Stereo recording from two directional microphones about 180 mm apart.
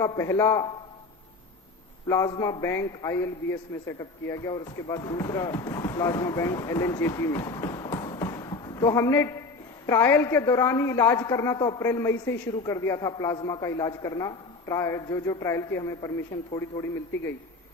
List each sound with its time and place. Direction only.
0.0 s a woman's voice: 15° left (ahead or behind)
2.0 s a man's voice: 20° left (ahead or behind)
7.9 s basketball bounce: 25° left (ahead or behind)
9.8 s a woman's voice: 15° left (ahead or behind)